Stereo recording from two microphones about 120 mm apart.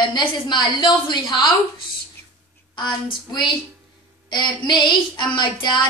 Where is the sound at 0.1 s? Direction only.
40° left (ahead or behind).